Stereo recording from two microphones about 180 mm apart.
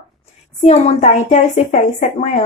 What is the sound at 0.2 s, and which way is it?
A woman's voice, 35° left (ahead or behind).